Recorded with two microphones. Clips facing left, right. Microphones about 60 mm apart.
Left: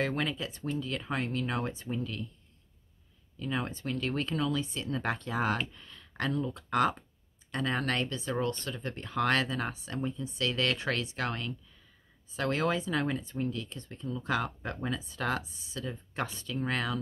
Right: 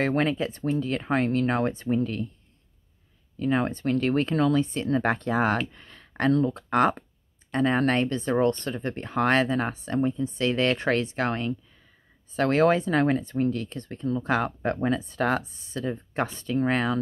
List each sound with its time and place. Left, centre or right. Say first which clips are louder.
0.0 s speech: right 8 dB; right
3.3 s speech: right 9 dB; right
5.7 s a sound: right 3 dB; right
6.5 s speech: right 6 dB; right
8.2 s speech: right 9 dB; right
12.3 s speech: right 9 dB; right